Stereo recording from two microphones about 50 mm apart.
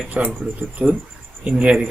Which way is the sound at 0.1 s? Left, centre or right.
Right.